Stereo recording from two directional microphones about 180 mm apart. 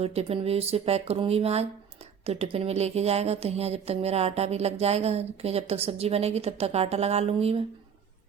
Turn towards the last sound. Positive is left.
turn(degrees=-35)  # may be behind; listen again after turning